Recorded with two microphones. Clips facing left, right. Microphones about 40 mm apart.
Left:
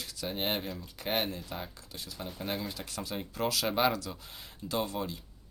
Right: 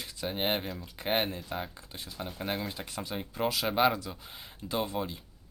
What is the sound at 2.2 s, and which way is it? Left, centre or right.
Speech, centre.